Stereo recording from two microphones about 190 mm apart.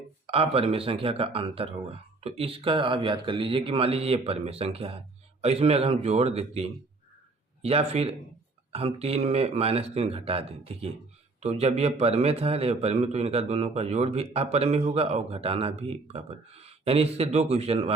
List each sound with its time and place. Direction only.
0.3 s a man's voice: 30° right (ahead or behind)